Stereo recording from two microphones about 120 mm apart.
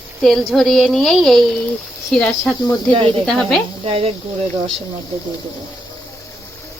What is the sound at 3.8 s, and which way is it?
Speech, 55° right (ahead or behind).